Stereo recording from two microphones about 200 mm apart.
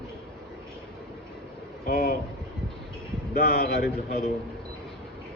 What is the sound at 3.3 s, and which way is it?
Speech, 50° left (ahead or behind).